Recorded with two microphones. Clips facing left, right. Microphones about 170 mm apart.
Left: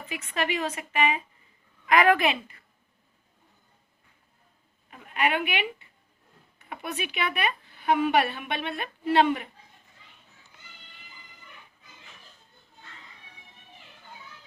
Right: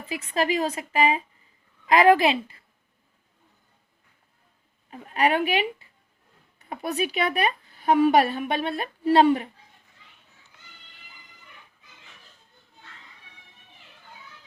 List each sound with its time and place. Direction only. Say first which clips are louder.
0.0 s speech: right 5 dB; 30° right (ahead or behind)
1.9 s a sound: right 4 dB; 30° right (ahead or behind)
4.9 s speech: right 4 dB; 35° right (ahead or behind)